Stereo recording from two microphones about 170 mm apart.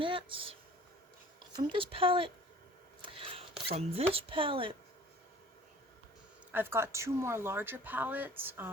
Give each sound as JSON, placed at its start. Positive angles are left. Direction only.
{"t": 0.0, "sound": "speech", "side_deg": -30}
{"t": 1.5, "sound": "speech", "side_deg": -30}
{"t": 3.0, "sound": "a sound", "side_deg": -30}
{"t": 3.7, "sound": "speech", "side_deg": -35}
{"t": 6.5, "sound": "speech", "side_deg": -10}